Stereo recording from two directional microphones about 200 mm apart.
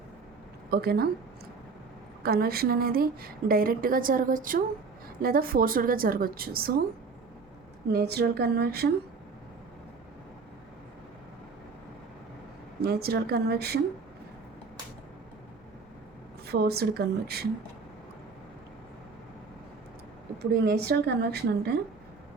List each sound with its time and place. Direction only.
0.7 s a woman's voice: 50° right (ahead or behind)
2.2 s a woman's voice: 50° right (ahead or behind)
7.9 s a woman's voice: 55° right (ahead or behind)
12.8 s a woman's voice: 50° right (ahead or behind)
16.5 s a woman's voice: 55° right (ahead or behind)
20.4 s a woman's voice: 55° right (ahead or behind)